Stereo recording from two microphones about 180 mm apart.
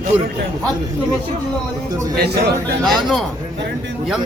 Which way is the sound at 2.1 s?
65° right (ahead or behind).